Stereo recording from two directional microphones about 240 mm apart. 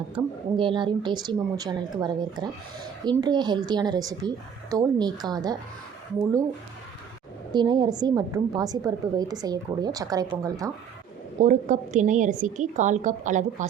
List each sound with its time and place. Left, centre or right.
0.1 s a woman's voice: right
7.5 s a woman's voice: centre
11.3 s a woman's voice: right